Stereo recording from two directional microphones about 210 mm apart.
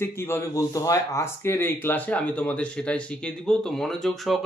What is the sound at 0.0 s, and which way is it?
A man's voice, 10° left (ahead or behind).